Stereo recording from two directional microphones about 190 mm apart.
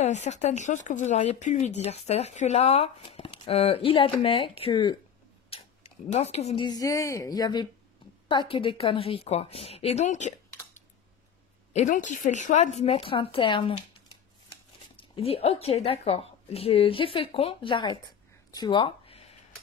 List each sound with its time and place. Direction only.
0.0 s speech: 40° left (ahead or behind)
5.5 s a sound: 30° left (ahead or behind)
6.1 s speech: 35° left (ahead or behind)
11.7 s speech: 40° left (ahead or behind)
15.0 s speech: 30° left (ahead or behind)
18.5 s a sound: 20° left (ahead or behind)